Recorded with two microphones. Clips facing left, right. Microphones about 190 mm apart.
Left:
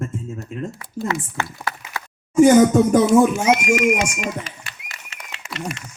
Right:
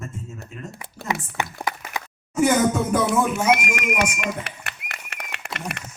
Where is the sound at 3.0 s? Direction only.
60° right (ahead or behind).